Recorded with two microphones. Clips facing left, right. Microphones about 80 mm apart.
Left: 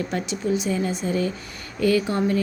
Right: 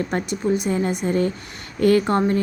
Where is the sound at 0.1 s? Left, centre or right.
Right.